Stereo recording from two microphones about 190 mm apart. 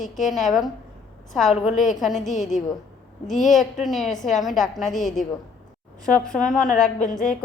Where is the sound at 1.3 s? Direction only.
Centre (ahead or behind).